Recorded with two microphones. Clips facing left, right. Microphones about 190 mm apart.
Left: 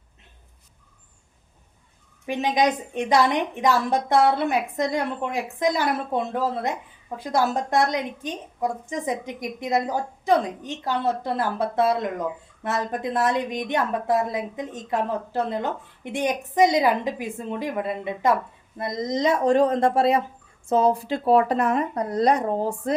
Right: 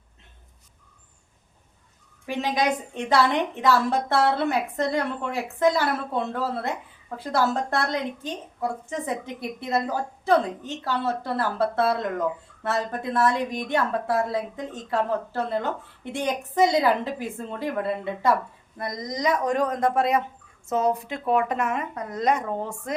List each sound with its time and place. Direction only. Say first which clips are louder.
2.2 s a woman's voice: left 3 dB; 20° left (ahead or behind)